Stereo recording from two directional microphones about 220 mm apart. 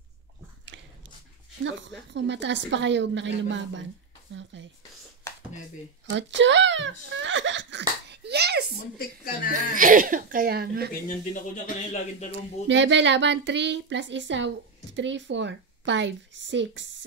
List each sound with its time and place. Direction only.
1.6 s a woman's voice: 55° right (ahead or behind)
6.1 s speech: 55° right (ahead or behind)
8.1 s a sound: 50° right (ahead or behind)
8.9 s speech: 40° left (ahead or behind)
9.5 s speech: 40° right (ahead or behind)
11.1 s speech: 35° left (ahead or behind)
12.6 s a woman's voice: 55° right (ahead or behind)